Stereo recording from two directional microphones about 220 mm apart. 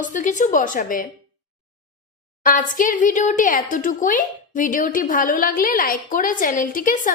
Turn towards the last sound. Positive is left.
turn(degrees=35)  # may be behind; listen again after turning